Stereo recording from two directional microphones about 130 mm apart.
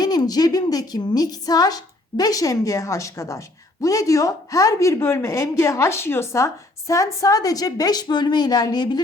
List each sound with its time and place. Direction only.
0.0 s a woman's voice: 30° left (ahead or behind)